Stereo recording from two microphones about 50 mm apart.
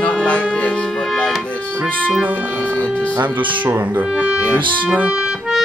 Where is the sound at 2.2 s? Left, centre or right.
Right.